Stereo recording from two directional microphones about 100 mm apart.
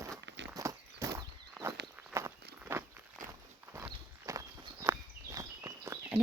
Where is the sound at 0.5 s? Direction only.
35° right (ahead or behind).